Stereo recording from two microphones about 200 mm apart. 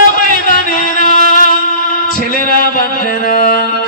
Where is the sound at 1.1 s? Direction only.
40° left (ahead or behind).